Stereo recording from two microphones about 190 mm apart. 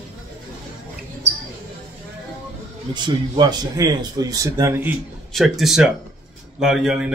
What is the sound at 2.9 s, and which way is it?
Speech, 25° right (ahead or behind).